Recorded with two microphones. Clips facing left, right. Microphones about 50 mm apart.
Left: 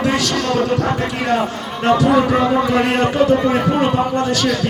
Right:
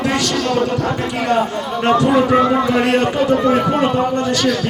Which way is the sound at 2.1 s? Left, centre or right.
Centre.